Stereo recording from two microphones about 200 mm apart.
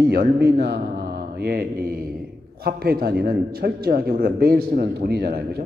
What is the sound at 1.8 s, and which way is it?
A man's voice, 45° right (ahead or behind).